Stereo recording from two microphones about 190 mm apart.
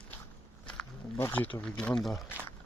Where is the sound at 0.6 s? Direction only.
5° left (ahead or behind).